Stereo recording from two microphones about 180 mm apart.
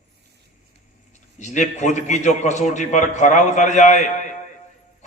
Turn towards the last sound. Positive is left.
turn(degrees=40)  # may be behind; listen again after turning